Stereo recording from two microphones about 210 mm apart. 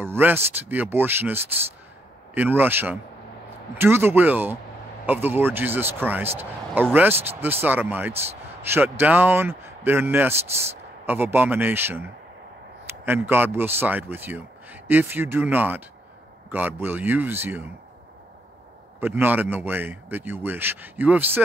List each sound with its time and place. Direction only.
0.0 s a man's voice: 10° right (ahead or behind)
13.0 s a man's voice: 10° right (ahead or behind)
18.9 s a man's voice: 10° right (ahead or behind)